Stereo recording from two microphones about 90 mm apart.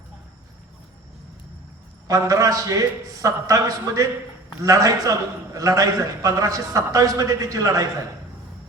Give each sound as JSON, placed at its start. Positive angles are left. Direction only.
{"t": 2.0, "sound": "a man's voice", "side_deg": -40}